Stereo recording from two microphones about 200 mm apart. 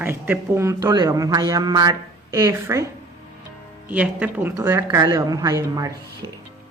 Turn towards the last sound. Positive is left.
turn(degrees=-15)  # may be behind; listen again after turning